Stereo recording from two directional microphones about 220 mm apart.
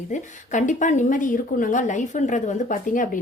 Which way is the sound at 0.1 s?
35° left (ahead or behind).